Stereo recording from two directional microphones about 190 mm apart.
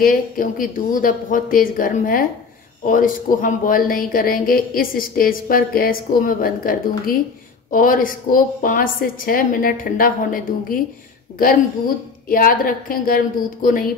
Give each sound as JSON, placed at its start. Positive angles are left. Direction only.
{"t": 0.0, "sound": "a woman's voice", "side_deg": 45}
{"t": 12.3, "sound": "a woman's voice", "side_deg": 50}